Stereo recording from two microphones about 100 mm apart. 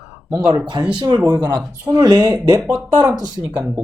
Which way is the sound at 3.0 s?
15° right (ahead or behind).